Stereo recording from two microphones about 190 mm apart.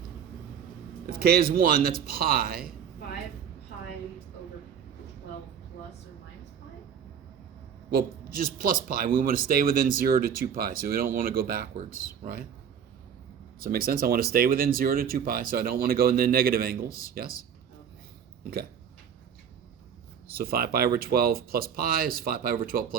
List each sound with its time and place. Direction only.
1.2 s speech: 55° right (ahead or behind)
8.6 s speech: 50° right (ahead or behind)
13.6 s speech: 50° right (ahead or behind)
20.3 s speech: 55° right (ahead or behind)